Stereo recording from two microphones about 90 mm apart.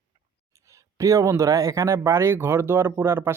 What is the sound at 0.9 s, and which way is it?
Speech, 35° right (ahead or behind).